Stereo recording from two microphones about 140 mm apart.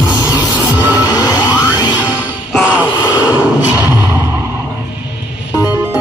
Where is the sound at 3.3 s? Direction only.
25° left (ahead or behind).